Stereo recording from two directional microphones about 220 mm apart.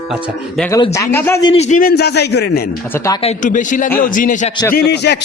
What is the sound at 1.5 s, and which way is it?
A man's voice, 30° left (ahead or behind).